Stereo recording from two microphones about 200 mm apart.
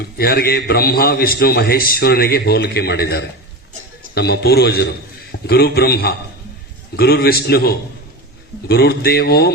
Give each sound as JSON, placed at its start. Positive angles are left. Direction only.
{"t": 0.2, "sound": "a man's voice", "side_deg": 50}